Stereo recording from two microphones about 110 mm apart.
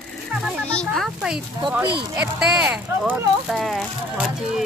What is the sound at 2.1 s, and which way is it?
Speech, 15° right (ahead or behind).